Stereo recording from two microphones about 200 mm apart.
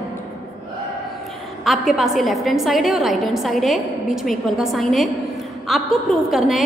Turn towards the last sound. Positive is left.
turn(degrees=0)  # may be behind; listen again after turning